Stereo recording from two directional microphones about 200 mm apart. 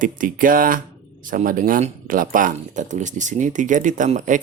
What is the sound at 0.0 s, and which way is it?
Speech, 40° right (ahead or behind).